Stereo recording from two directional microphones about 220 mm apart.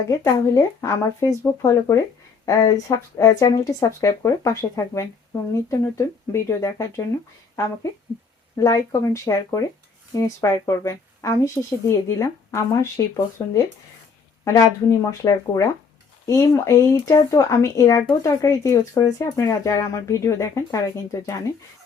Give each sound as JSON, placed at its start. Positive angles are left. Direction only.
{"t": 0.1, "sound": "speech", "side_deg": 15}
{"t": 8.5, "sound": "speech", "side_deg": 15}